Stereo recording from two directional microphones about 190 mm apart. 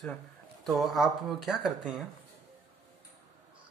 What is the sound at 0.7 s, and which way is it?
Speech, centre (ahead or behind).